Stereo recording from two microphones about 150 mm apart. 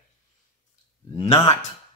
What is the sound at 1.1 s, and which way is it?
Speech, 30° left (ahead or behind).